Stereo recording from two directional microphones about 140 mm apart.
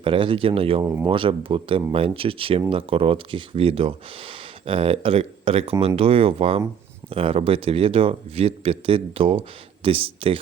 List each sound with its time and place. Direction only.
0.0 s speech: 40° right (ahead or behind)